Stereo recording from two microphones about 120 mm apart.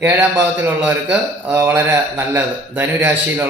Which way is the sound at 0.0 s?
15° right (ahead or behind).